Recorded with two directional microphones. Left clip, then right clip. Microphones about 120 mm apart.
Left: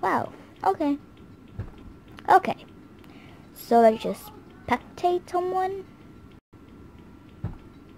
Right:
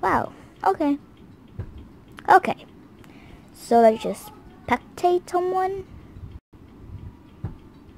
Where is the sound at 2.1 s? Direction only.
15° right (ahead or behind).